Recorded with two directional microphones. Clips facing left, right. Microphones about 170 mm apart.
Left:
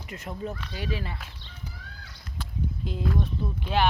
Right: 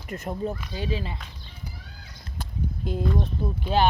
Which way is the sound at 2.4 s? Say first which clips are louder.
Right 1 dB; 45° right (ahead or behind).